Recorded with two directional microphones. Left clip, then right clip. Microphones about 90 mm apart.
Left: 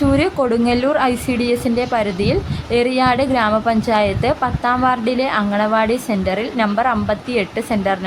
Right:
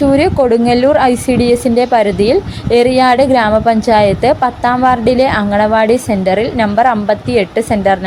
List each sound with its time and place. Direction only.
0.1 s a woman's voice: 30° right (ahead or behind)